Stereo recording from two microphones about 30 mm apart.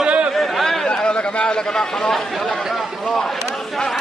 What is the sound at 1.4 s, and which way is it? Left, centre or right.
Speech, left.